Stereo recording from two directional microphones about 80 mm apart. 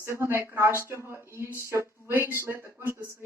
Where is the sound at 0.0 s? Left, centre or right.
Right.